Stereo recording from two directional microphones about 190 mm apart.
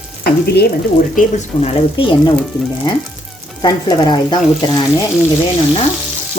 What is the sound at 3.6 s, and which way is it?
Speech, 20° left (ahead or behind).